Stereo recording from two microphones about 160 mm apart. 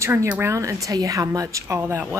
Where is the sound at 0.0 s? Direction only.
15° right (ahead or behind).